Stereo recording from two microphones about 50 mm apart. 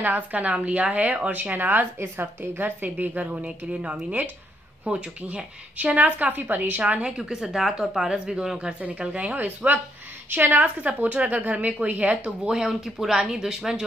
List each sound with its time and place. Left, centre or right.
0.0 s a woman's voice: right
2.0 s a woman's voice: right; by 8.5 s centre
8.5 s a woman's voice: right